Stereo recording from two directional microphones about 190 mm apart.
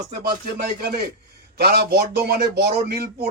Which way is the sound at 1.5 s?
55° right (ahead or behind).